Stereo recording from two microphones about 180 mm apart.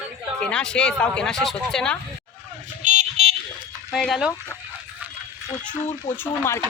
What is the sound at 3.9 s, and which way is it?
Speech, centre (ahead or behind).